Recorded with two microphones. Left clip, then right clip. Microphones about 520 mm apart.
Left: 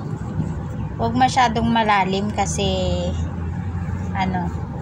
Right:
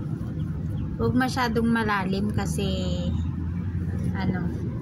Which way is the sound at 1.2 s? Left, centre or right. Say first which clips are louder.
Left 11 dB; right.